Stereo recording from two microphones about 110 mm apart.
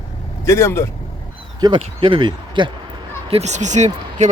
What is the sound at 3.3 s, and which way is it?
Speech, 80° right.